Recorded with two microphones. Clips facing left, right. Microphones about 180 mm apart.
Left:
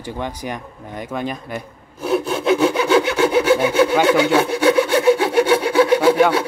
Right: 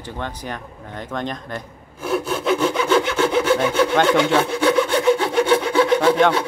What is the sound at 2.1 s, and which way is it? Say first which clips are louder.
Sawing: left 3 dB; 5° left (ahead or behind).